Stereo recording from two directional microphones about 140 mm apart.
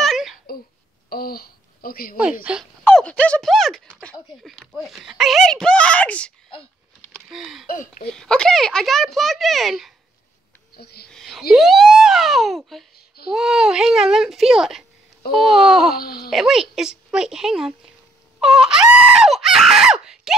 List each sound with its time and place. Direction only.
0.0 s wail: centre (ahead or behind)
1.1 s speech: 90° left
2.5 s speech: 5° right (ahead or behind)
2.8 s speech: 5° left (ahead or behind)
4.8 s screaming: centre (ahead or behind)
7.2 s a sound: 5° right (ahead or behind)
7.6 s speech: 75° left (ahead or behind)
8.1 s screaming: 5° left (ahead or behind)
11.1 s a sound: centre (ahead or behind)
11.5 s screaming: centre (ahead or behind)
16.0 s speech: 90° left
16.3 s screaming: centre (ahead or behind)